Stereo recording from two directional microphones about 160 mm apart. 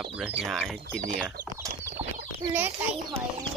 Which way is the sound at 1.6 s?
20° right (ahead or behind).